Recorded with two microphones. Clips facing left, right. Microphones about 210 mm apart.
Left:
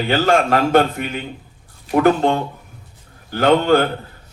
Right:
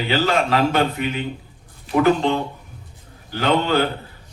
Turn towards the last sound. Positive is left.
turn(degrees=50)  # may be behind; listen again after turning